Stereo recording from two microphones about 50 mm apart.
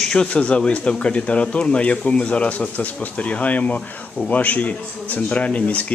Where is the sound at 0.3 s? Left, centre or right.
Left.